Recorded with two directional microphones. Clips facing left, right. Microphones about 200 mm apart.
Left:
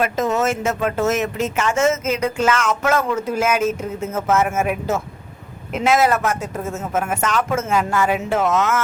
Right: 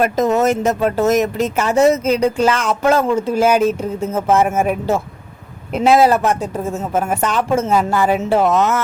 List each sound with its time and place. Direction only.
0.0 s speech: 40° right (ahead or behind)